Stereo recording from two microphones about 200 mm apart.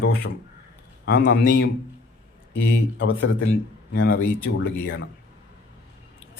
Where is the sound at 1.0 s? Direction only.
50° left (ahead or behind).